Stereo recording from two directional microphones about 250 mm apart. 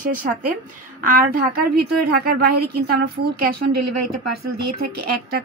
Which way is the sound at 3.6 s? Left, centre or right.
Right.